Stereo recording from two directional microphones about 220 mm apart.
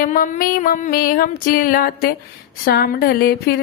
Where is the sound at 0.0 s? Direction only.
40° left (ahead or behind).